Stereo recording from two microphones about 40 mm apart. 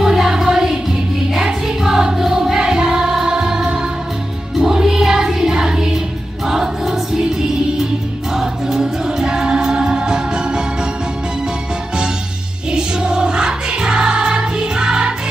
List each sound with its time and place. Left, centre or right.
0.0 s music: centre
6.4 s choir: centre
8.4 s music: centre
12.7 s music: right